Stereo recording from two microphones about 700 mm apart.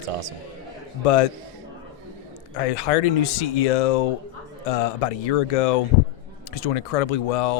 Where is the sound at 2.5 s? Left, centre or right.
Left.